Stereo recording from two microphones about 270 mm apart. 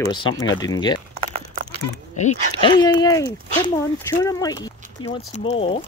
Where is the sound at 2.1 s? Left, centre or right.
Left.